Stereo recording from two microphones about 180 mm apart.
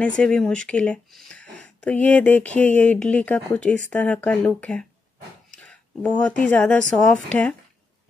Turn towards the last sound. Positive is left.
turn(degrees=5)  # may be behind; listen again after turning